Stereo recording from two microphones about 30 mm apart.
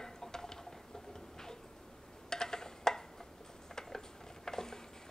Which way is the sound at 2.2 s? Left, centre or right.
Centre.